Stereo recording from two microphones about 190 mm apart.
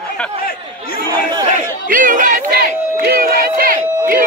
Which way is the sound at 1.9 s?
45° right (ahead or behind).